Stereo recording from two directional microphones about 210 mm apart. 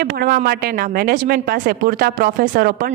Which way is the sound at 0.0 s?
45° right (ahead or behind).